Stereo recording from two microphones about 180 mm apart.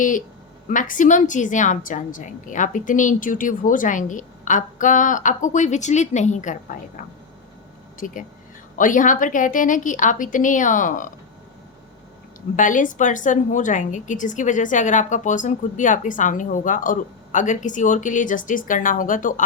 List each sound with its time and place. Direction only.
0.7 s a woman's voice: 45° left (ahead or behind)
7.9 s a woman's voice: 45° left (ahead or behind)
12.5 s a woman's voice: 45° left (ahead or behind)